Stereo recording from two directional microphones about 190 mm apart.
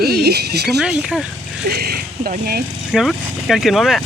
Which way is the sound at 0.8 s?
Centre (ahead or behind).